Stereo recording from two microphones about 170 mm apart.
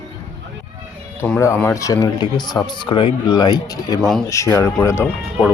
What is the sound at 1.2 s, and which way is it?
Speech, 15° left (ahead or behind).